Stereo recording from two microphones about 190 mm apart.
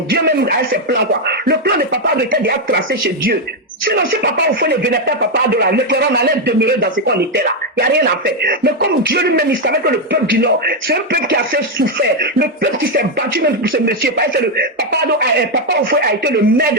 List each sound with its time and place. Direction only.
0.1 s speech: 55° right (ahead or behind)